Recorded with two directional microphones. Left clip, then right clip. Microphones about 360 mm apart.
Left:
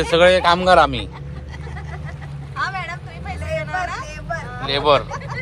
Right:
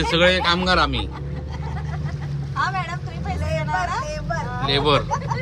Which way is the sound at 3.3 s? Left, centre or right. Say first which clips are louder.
Even; centre.